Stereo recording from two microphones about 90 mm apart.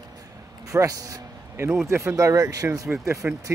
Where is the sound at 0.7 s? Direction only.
40° right (ahead or behind).